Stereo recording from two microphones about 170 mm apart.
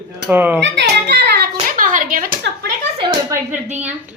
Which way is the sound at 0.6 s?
80° right.